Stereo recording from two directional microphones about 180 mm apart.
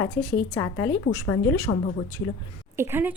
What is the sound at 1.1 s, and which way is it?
Speech, 15° left (ahead or behind).